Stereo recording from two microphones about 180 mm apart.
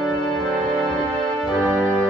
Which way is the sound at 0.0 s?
5° left (ahead or behind).